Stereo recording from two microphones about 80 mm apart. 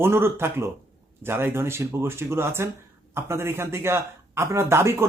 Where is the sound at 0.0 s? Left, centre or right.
Right.